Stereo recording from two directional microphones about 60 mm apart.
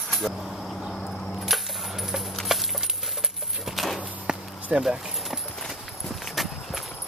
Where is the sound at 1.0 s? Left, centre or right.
Centre.